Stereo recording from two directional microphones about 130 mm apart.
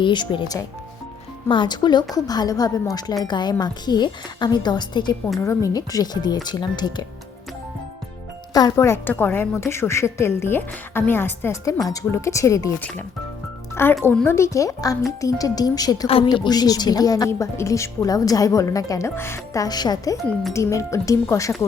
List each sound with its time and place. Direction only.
0.0 s a woman's voice: 35° left (ahead or behind)
5.4 s a woman's voice: 25° left (ahead or behind)
8.5 s a woman's voice: 25° left (ahead or behind)
13.8 s a woman's voice: 20° left (ahead or behind)
16.0 s a woman's voice: 45° left (ahead or behind)
16.3 s a woman's voice: 30° left (ahead or behind)
19.6 s a woman's voice: 30° left (ahead or behind)